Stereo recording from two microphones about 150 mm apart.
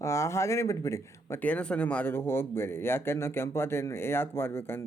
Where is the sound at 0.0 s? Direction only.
20° left (ahead or behind).